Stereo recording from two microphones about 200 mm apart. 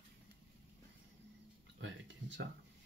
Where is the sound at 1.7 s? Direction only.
65° right (ahead or behind).